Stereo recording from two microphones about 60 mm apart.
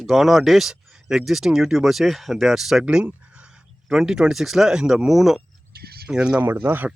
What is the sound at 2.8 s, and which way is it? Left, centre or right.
Speech, right.